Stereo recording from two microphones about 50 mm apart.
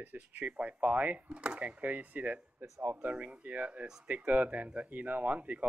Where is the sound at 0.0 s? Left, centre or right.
Right.